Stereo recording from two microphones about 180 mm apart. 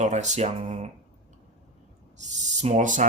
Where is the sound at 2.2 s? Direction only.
40° right (ahead or behind).